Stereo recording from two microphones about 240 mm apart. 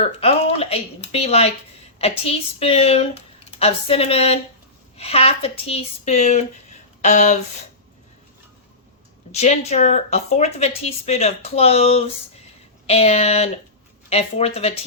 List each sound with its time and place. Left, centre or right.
0.0 s a woman's voice: left
9.3 s a woman's voice: left